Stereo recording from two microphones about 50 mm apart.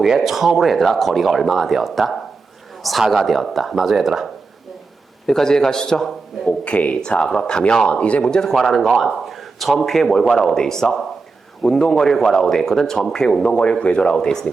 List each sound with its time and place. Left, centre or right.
0.0 s a man's voice: centre
5.2 s speech: centre
6.4 s speech: left
8.2 s speech: centre
8.5 s a man's voice: centre
13.5 s speech: left